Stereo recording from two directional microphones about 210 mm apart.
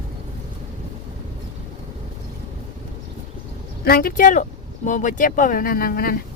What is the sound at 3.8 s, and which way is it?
Speech, 45° left (ahead or behind).